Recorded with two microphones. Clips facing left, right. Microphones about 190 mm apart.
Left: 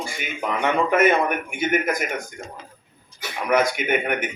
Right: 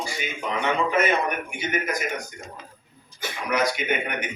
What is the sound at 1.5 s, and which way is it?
Speech, 50° left (ahead or behind).